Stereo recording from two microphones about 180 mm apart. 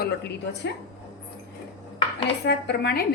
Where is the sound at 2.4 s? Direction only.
70° left (ahead or behind).